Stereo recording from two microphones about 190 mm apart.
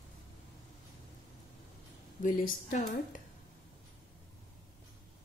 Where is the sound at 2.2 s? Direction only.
45° left (ahead or behind).